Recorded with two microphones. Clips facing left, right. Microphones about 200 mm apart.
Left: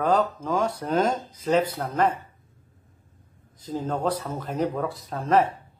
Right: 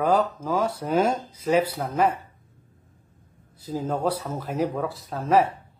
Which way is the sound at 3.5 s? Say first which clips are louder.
Right 1 dB; 10° right (ahead or behind).